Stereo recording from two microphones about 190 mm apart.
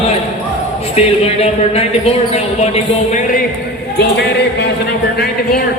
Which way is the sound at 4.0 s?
60° left (ahead or behind).